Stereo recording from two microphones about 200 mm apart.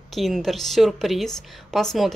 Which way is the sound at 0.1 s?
Centre (ahead or behind).